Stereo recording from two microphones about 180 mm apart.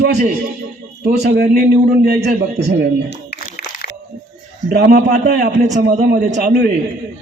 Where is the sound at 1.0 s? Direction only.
60° right (ahead or behind).